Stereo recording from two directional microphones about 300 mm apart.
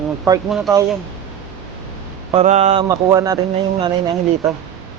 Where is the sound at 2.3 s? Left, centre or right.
Right.